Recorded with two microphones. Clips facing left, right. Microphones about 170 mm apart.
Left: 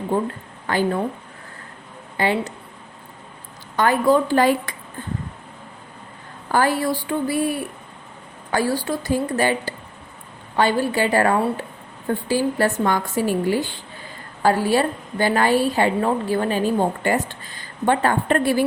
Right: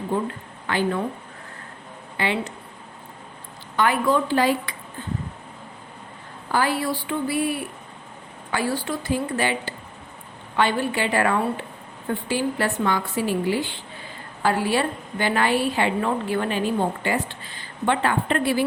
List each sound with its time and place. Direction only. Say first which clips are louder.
0.7 s a woman's voice: left 3 dB; 40° left (ahead or behind)
2.1 s speech: left 4 dB; 40° left (ahead or behind)
3.8 s a woman's voice: left 4 dB; 40° left (ahead or behind)
6.5 s a woman's voice: left 3 dB; 45° left (ahead or behind)
8.5 s a woman's voice: left 4 dB; 40° left (ahead or behind)